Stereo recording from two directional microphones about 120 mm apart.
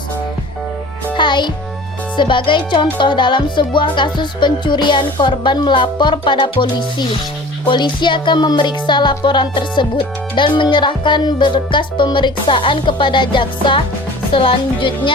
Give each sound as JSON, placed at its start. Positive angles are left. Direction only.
{"t": 1.1, "sound": "music", "side_deg": 40}
{"t": 10.3, "sound": "speech", "side_deg": 45}